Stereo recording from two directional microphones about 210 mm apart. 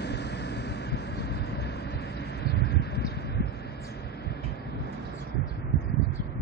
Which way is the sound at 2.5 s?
50° left (ahead or behind).